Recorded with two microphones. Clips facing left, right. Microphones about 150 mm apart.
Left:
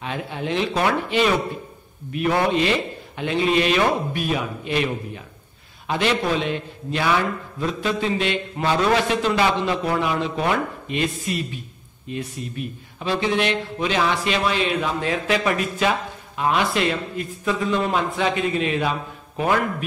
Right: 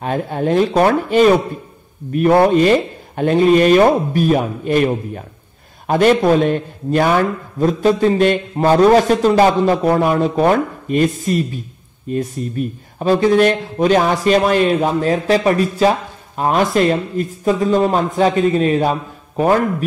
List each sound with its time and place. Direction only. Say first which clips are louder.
0.0 s a man's voice: right 9 dB; 45° right (ahead or behind)